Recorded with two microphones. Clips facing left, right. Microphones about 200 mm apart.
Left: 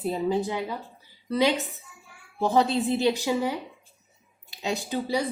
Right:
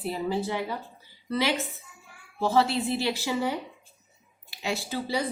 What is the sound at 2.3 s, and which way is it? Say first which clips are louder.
A woman's voice: left 1 dB; 15° left (ahead or behind).